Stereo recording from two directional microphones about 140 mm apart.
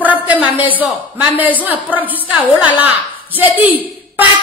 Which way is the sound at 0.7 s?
10° right (ahead or behind).